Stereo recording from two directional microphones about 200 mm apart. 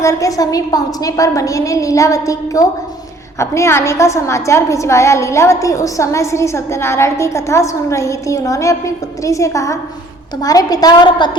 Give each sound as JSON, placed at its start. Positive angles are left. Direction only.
{"t": 0.0, "sound": "a woman's voice", "side_deg": 15}